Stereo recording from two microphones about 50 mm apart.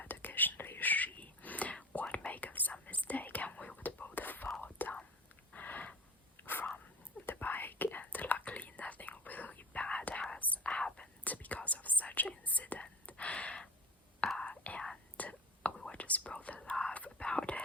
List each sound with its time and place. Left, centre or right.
0.1 s whispering: left
5.5 s a sound: left
6.4 s dog: left
7.3 s whispering: left; by 11.1 s centre
11.2 s whispering: left
16.6 s whispering: centre
16.9 s whispering: left